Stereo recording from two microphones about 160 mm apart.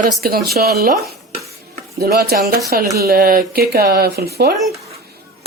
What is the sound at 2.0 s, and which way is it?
Speech, 75° right (ahead or behind).